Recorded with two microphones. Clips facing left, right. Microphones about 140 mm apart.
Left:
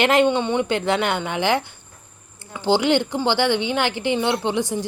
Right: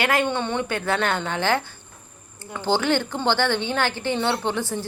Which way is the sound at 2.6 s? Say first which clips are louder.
Left 4 dB; 15° left (ahead or behind).